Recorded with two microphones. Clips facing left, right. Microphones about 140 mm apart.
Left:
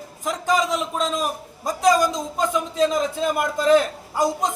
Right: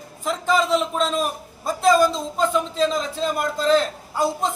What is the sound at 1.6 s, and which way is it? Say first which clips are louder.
A man's voice: right 1 dB; 15° left (ahead or behind).